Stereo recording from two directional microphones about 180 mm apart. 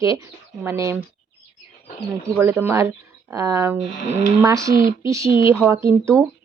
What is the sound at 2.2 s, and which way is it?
A woman's voice, 15° right (ahead or behind).